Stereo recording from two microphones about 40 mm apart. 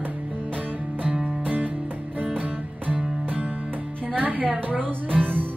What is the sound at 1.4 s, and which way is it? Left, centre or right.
Music, right.